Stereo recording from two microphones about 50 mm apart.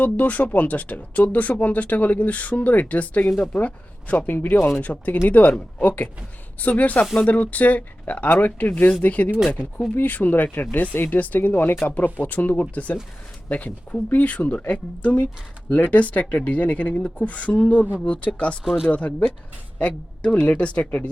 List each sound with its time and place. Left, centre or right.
0.0 s speech: left
4.3 s speech: left
4.8 s speech: left
18.6 s speech: centre
18.9 s speech: left